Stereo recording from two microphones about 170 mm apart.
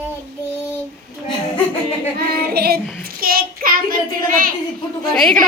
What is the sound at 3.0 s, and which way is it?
A child's voice, 60° right (ahead or behind).